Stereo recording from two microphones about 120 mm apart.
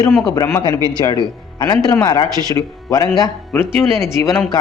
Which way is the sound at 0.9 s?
35° left (ahead or behind).